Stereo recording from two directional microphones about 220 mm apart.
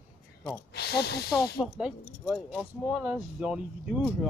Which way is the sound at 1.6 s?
Centre (ahead or behind).